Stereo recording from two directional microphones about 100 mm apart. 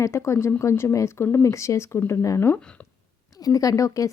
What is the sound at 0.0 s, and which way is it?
Speech, 30° left (ahead or behind).